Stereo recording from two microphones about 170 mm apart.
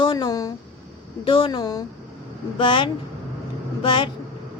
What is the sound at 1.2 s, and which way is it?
A woman's voice, 30° left (ahead or behind).